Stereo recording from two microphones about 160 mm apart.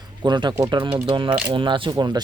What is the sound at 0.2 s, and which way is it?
Speech, 30° right (ahead or behind).